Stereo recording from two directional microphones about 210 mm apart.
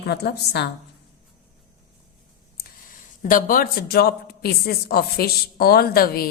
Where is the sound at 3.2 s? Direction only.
40° left (ahead or behind).